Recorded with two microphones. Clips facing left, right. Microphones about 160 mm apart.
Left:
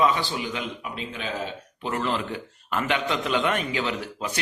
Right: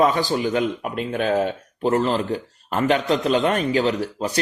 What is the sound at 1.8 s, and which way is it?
A man's voice, 40° right (ahead or behind).